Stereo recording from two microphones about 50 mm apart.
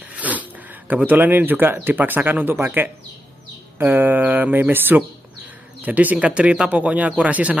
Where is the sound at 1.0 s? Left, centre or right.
Right.